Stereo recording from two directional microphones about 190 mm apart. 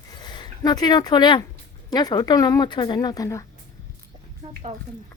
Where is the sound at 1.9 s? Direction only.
20° left (ahead or behind).